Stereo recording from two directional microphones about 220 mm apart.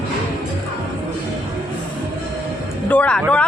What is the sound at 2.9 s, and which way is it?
Speech, 5° left (ahead or behind).